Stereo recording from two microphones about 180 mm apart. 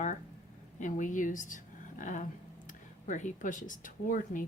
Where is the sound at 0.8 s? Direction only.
45° left (ahead or behind).